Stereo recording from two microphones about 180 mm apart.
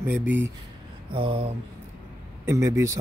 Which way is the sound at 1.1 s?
30° right (ahead or behind).